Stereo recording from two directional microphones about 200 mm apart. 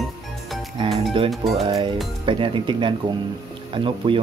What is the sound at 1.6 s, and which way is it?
Speech, 25° right (ahead or behind).